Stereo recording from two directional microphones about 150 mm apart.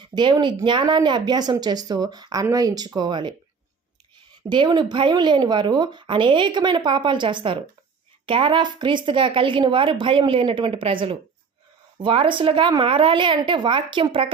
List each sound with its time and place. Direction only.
0.0 s speech: 30° right (ahead or behind)
4.4 s speech: 30° right (ahead or behind)